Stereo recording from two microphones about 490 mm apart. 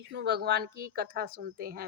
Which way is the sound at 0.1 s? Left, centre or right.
Centre.